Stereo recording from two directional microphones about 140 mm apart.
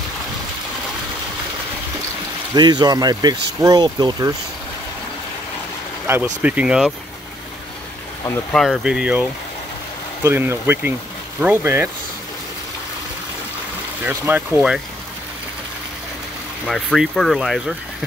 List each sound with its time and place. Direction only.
2.5 s speech: 30° right (ahead or behind)
6.0 s speech: 15° right (ahead or behind)
8.5 s speech: centre (ahead or behind)
10.2 s speech: 15° right (ahead or behind)
14.0 s speech: 15° right (ahead or behind)
16.6 s speech: centre (ahead or behind)